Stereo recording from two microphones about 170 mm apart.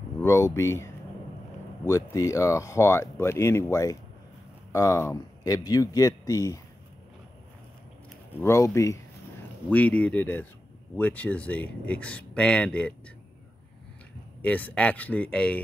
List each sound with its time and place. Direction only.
0.2 s speech: 15° left (ahead or behind)
8.4 s speech: 15° left (ahead or behind)
14.4 s speech: 10° left (ahead or behind)